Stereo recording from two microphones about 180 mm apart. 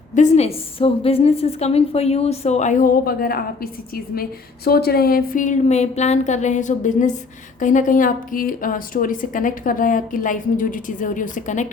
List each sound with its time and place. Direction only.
0.1 s a woman's voice: 40° left (ahead or behind)